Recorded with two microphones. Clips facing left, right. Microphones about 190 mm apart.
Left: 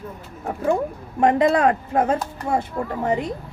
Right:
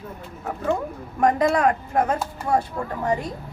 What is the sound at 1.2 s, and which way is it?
Speech, 30° left (ahead or behind).